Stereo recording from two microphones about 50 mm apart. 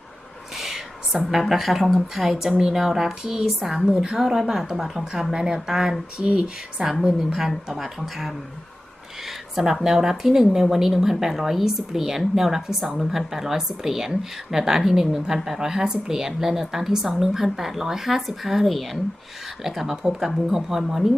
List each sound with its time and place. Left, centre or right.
0.5 s a sound: centre
1.3 s a woman's voice: centre
2.5 s speech: centre
2.7 s speech: centre
6.2 s speech: right
7.5 s a woman's voice: centre